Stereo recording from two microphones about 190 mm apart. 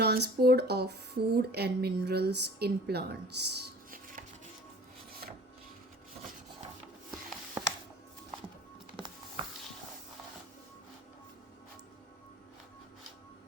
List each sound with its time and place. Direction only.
0.0 s speech: 55° right (ahead or behind)
7.1 s music: centre (ahead or behind)